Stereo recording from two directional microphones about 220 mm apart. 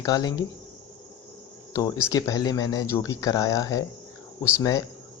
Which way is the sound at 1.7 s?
15° left (ahead or behind).